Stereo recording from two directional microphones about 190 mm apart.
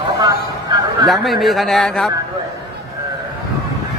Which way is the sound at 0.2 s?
20° right (ahead or behind).